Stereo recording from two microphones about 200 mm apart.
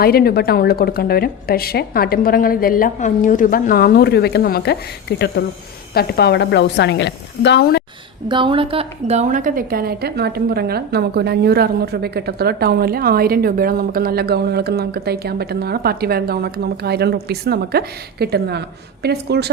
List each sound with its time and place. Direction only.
0.0 s a woman's voice: 50° left (ahead or behind)
8.3 s a woman's voice: 25° right (ahead or behind); by 19.5 s 55° right (ahead or behind)